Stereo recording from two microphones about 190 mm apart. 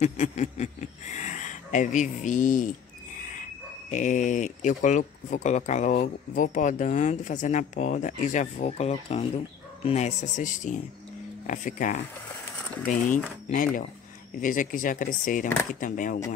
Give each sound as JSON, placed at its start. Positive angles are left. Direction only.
{"t": 0.0, "sound": "speech", "side_deg": 35}
{"t": 3.9, "sound": "speech", "side_deg": 40}